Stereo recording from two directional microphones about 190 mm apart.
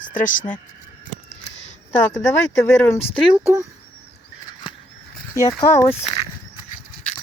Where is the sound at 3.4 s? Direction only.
15° right (ahead or behind).